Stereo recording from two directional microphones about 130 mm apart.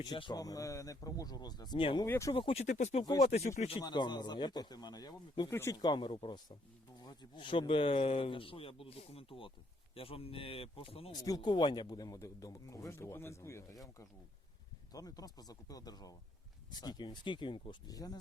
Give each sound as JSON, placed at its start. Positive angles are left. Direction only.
{"t": 0.0, "sound": "speech", "side_deg": 35}
{"t": 2.0, "sound": "speech", "side_deg": 20}
{"t": 2.3, "sound": "a man's voice", "side_deg": 45}
{"t": 2.6, "sound": "speech", "side_deg": 65}
{"t": 3.8, "sound": "speech", "side_deg": 35}
{"t": 5.5, "sound": "speech", "side_deg": 20}
{"t": 5.8, "sound": "a man's voice", "side_deg": 35}
{"t": 11.1, "sound": "speech", "side_deg": 25}